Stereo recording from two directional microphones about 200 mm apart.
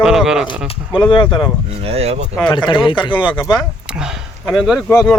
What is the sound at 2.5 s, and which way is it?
Speech, 25° left (ahead or behind).